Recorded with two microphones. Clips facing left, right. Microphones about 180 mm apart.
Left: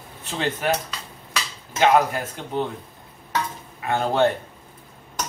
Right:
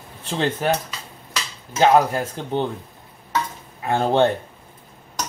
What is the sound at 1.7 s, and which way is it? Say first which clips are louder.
Speech: right 2 dB; 35° right (ahead or behind).